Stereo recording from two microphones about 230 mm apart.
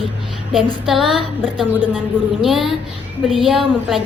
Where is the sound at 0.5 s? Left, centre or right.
Centre.